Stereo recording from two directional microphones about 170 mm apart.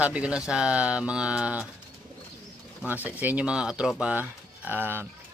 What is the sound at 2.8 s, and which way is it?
Speech, 10° right (ahead or behind).